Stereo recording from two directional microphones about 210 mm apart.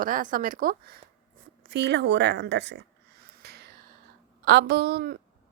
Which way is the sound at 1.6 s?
50° right (ahead or behind).